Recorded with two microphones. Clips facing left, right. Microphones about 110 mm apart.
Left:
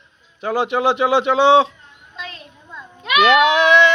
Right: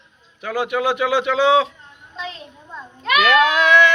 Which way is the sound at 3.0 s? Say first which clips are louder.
Left 2 dB; 20° left (ahead or behind).